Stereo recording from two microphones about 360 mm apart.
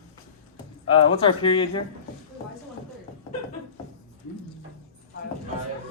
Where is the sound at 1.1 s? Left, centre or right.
Centre.